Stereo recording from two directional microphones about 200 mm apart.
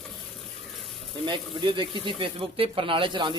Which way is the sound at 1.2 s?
25° right (ahead or behind).